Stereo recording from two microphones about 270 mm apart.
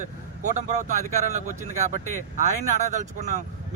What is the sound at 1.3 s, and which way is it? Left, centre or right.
Speech, right.